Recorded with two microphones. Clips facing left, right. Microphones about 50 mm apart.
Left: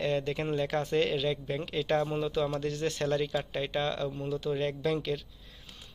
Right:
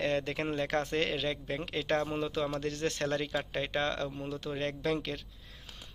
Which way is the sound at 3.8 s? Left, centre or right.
Right.